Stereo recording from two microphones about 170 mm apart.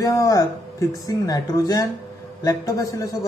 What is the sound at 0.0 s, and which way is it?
Speech, 20° left (ahead or behind).